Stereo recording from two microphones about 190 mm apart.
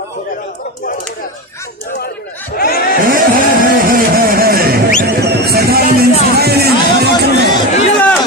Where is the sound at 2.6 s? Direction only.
50° left (ahead or behind).